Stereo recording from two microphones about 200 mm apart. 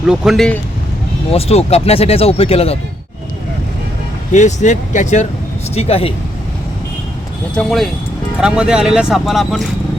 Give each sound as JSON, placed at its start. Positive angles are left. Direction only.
{"t": 0.1, "sound": "speech", "side_deg": 0}
{"t": 1.3, "sound": "speech", "side_deg": 30}
{"t": 4.3, "sound": "speech", "side_deg": 35}
{"t": 7.5, "sound": "speech", "side_deg": 5}